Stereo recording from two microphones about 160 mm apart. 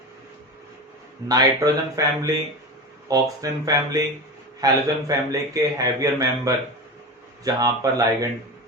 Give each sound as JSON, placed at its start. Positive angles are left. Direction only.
{"t": 1.3, "sound": "a man's voice", "side_deg": -20}